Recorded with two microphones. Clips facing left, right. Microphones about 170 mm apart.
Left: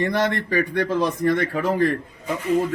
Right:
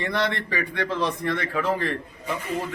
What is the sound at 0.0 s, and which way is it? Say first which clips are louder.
A man's voice: left 4 dB; 45° left (ahead or behind).